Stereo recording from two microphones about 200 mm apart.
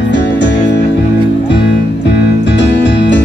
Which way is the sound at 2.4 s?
60° left (ahead or behind).